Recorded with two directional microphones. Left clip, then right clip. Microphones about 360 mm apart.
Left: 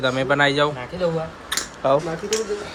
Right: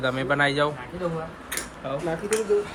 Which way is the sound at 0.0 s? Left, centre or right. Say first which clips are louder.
Left 4 dB; centre.